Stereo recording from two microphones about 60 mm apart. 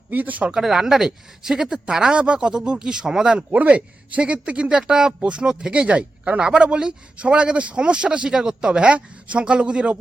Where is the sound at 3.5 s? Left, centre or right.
Right.